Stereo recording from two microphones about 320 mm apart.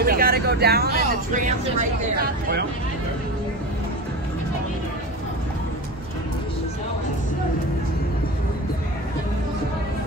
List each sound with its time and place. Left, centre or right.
0.0 s speech: right